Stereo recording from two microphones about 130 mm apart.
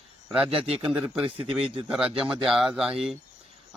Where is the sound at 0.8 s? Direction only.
10° right (ahead or behind).